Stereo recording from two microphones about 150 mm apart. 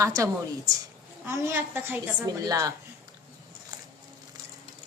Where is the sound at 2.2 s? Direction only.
25° right (ahead or behind).